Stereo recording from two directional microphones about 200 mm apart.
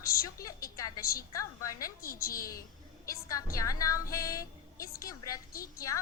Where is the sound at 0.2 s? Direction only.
15° left (ahead or behind).